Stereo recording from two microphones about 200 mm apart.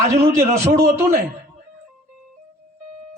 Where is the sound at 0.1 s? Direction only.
15° right (ahead or behind).